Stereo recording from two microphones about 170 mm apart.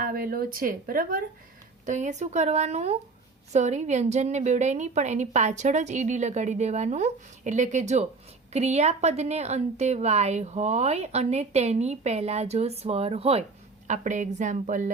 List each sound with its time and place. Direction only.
0.0 s speech: 60° right (ahead or behind)
1.9 s a woman's voice: 45° right (ahead or behind)
13.8 s a woman's voice: 45° right (ahead or behind)